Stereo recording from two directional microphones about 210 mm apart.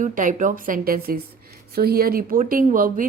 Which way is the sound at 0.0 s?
40° right (ahead or behind).